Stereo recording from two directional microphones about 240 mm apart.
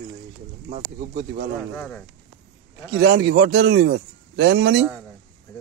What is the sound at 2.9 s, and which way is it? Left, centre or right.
A man's voice, right.